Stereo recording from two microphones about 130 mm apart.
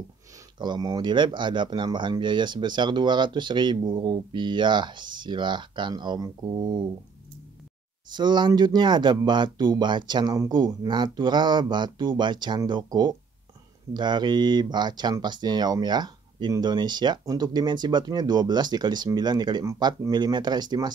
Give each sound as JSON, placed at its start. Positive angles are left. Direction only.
{"t": 0.6, "sound": "speech", "side_deg": -30}
{"t": 8.1, "sound": "speech", "side_deg": -35}